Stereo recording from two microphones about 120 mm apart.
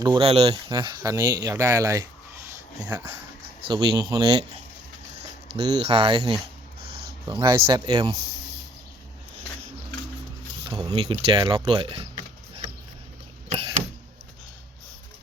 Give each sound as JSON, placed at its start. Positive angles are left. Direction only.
{"t": 0.0, "sound": "speech", "side_deg": -45}
{"t": 0.5, "sound": "speech", "side_deg": -35}
{"t": 1.0, "sound": "speech", "side_deg": -25}
{"t": 2.8, "sound": "speech", "side_deg": -15}
{"t": 3.7, "sound": "speech", "side_deg": -40}
{"t": 5.5, "sound": "speech", "side_deg": -35}
{"t": 5.8, "sound": "speech", "side_deg": -50}
{"t": 7.3, "sound": "speech", "side_deg": -30}
{"t": 10.7, "sound": "speech", "side_deg": -35}